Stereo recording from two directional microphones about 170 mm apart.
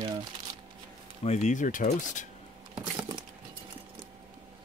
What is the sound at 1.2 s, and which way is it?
Speech, 40° left (ahead or behind).